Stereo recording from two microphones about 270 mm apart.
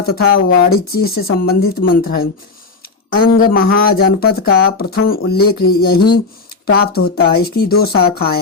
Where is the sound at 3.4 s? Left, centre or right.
Left.